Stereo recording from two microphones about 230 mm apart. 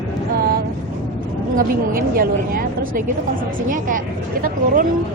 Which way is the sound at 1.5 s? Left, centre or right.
Right.